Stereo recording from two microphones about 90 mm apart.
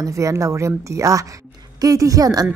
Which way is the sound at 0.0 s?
35° right (ahead or behind).